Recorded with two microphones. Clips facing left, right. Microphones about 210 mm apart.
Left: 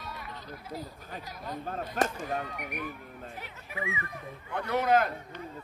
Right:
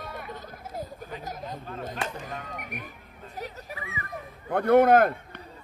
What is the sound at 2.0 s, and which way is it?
Speech, 45° left (ahead or behind).